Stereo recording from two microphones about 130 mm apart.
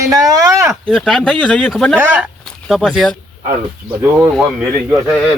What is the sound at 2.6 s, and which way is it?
Speech, centre (ahead or behind).